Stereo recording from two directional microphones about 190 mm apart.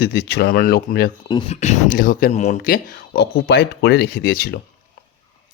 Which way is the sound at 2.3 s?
35° left (ahead or behind).